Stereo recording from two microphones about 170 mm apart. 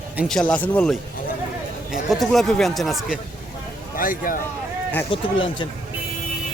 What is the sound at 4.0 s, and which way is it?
Speech, 55° left (ahead or behind).